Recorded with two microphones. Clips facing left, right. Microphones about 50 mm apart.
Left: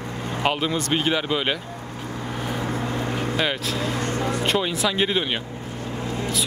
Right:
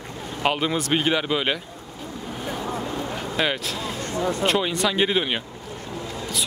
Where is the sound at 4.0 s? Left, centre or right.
Left.